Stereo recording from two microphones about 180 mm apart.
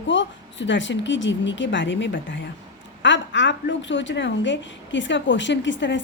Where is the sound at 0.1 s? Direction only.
90° left.